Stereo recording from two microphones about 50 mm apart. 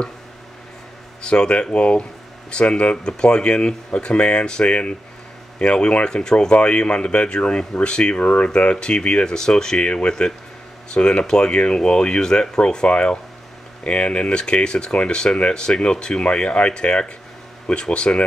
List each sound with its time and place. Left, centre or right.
1.2 s speech: centre